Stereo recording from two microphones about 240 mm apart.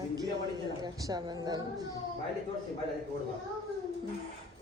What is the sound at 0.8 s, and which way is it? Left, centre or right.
Speech, centre.